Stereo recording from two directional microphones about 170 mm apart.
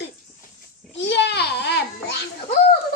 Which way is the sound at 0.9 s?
90° left.